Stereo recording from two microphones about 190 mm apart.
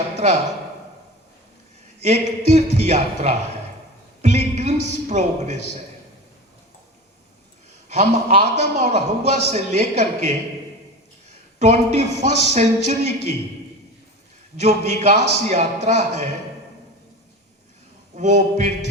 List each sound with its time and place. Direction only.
2.0 s a man's voice: 35° right (ahead or behind)
7.9 s a man's voice: 35° right (ahead or behind)
11.6 s a man's voice: 35° right (ahead or behind)
14.5 s a man's voice: 35° right (ahead or behind)
18.1 s a man's voice: 40° right (ahead or behind)